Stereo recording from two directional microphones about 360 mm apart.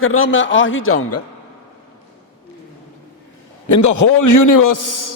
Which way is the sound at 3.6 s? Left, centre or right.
Left.